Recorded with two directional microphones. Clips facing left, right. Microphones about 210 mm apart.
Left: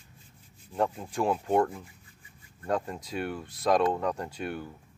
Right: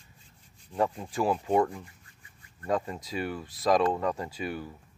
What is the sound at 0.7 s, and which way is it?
Speech, 5° left (ahead or behind).